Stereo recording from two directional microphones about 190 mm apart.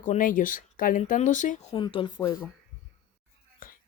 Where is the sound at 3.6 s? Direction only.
45° left (ahead or behind).